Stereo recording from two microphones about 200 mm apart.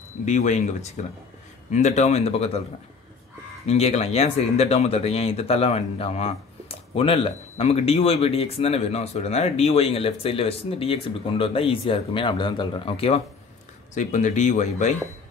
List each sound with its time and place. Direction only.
0.2 s speech: 35° left (ahead or behind)
3.6 s speech: 30° left (ahead or behind)